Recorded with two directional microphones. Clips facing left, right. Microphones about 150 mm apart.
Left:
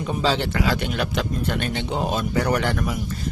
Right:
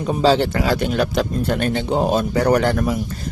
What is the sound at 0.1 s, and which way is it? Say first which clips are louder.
Speech: right 7 dB; 40° right (ahead or behind).